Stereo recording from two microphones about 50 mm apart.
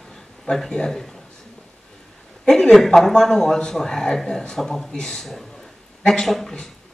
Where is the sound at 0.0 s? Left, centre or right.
Centre.